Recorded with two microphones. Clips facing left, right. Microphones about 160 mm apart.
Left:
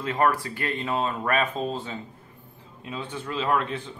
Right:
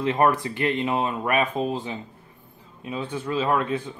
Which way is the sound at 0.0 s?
20° right (ahead or behind).